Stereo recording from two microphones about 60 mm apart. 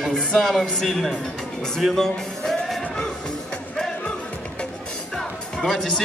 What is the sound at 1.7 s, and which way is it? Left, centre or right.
Music, centre.